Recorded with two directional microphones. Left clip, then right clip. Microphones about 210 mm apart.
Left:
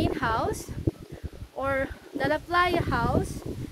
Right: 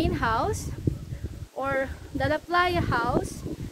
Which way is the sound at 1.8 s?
10° left (ahead or behind).